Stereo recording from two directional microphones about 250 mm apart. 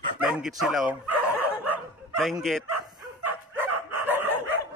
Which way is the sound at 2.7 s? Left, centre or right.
Right.